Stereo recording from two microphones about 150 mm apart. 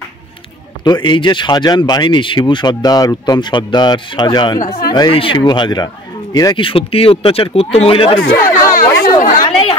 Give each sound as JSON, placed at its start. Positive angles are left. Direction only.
{"t": 0.8, "sound": "speech", "side_deg": 30}
{"t": 8.5, "sound": "chatter", "side_deg": 65}